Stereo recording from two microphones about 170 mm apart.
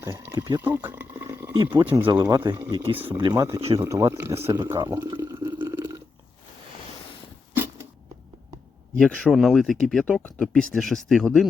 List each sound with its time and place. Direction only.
0.0 s speech: 20° right (ahead or behind)
0.7 s a sound: 10° right (ahead or behind)
1.5 s speech: 30° right (ahead or behind)
1.8 s speech: 10° right (ahead or behind)
4.8 s water: 20° right (ahead or behind)
7.5 s a sound: 10° right (ahead or behind)
9.0 s speech: 5° left (ahead or behind)